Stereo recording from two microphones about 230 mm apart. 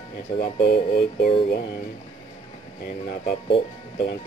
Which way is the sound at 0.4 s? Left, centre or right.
Left.